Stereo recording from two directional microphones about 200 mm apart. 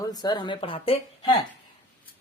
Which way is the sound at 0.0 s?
20° left (ahead or behind).